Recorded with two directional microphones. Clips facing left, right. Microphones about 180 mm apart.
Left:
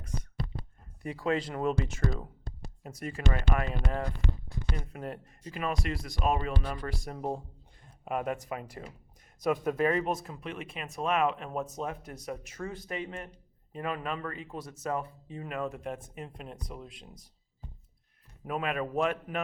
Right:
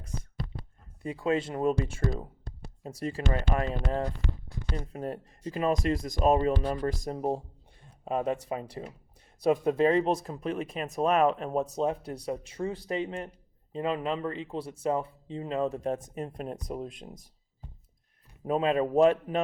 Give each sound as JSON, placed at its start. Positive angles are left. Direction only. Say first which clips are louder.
{"t": 1.0, "sound": "speech", "louder": "right 2 dB", "side_deg": -25}
{"t": 5.7, "sound": "speech", "louder": "right 7 dB", "side_deg": -40}
{"t": 7.2, "sound": "speech", "louder": "right 4 dB", "side_deg": -20}
{"t": 18.4, "sound": "speech", "louder": "right 7 dB", "side_deg": -30}